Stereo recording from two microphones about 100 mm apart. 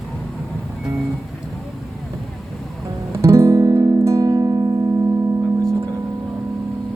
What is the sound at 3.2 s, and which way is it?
Music, 30° right (ahead or behind).